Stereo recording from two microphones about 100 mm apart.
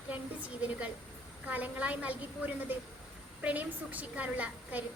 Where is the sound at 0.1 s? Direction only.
15° right (ahead or behind).